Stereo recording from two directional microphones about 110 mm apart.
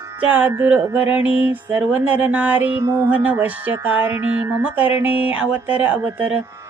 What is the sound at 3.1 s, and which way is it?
Speech, 10° right (ahead or behind).